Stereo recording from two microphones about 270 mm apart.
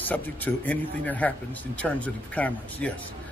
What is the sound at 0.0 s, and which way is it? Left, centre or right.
Speech, centre.